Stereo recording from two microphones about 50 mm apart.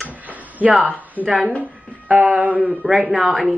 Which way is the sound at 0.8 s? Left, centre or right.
Right.